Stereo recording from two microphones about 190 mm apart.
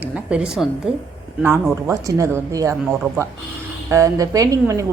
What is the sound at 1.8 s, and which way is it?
Speech, 15° right (ahead or behind).